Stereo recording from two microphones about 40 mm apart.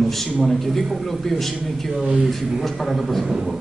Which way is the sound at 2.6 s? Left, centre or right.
Centre.